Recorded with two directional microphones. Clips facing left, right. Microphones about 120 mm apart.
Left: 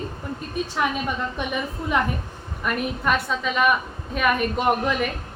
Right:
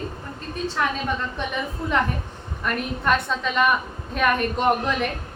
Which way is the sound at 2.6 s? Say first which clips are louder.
Left 1 dB; 5° left (ahead or behind).